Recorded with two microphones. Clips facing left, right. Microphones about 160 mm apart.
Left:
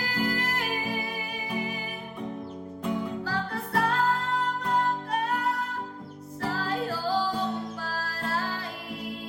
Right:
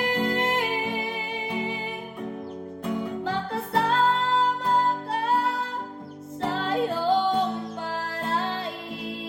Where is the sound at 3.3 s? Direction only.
25° right (ahead or behind).